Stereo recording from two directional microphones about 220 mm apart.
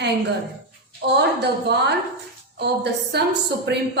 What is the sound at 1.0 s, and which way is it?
A woman's voice, 50° right (ahead or behind).